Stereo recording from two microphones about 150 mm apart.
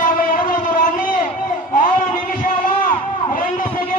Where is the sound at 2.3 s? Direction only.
65° left (ahead or behind).